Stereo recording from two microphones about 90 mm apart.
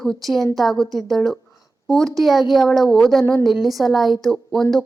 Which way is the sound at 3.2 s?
30° left (ahead or behind).